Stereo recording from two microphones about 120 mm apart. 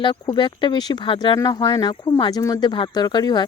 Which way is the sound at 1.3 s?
30° left (ahead or behind).